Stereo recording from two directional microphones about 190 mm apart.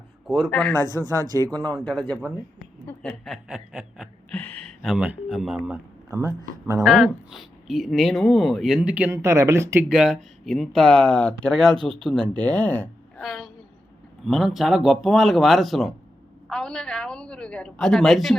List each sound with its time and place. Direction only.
0.3 s speech: centre (ahead or behind)
0.8 s speech: 20° right (ahead or behind)
1.4 s speech: 5° left (ahead or behind); by 6.3 s 10° right (ahead or behind)
6.8 s speech: centre (ahead or behind)
9.9 s a woman's voice: centre (ahead or behind)